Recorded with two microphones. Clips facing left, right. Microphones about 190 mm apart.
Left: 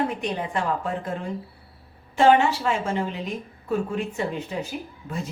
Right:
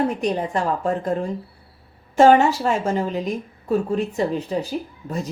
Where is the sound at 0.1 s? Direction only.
40° right (ahead or behind).